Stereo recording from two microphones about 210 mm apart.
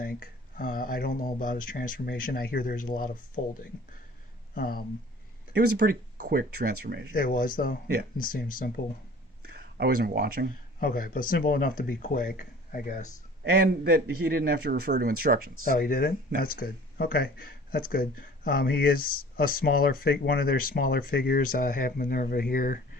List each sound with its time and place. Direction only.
0.0 s speech: 45° left (ahead or behind)
5.5 s a man's voice: 45° right (ahead or behind)
7.1 s speech: 40° left (ahead or behind)
9.5 s speech: 50° right (ahead or behind)
10.8 s speech: 45° left (ahead or behind)
13.4 s a man's voice: 50° right (ahead or behind)
15.8 s speech: 45° left (ahead or behind)